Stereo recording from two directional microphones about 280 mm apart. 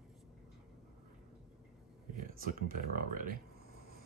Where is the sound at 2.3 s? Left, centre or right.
Right.